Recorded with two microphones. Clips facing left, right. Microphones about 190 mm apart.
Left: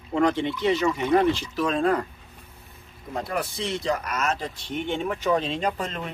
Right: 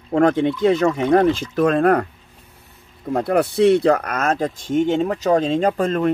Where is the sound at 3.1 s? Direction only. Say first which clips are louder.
Right 11 dB; 60° right (ahead or behind).